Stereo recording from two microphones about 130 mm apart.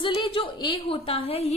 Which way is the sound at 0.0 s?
40° left (ahead or behind).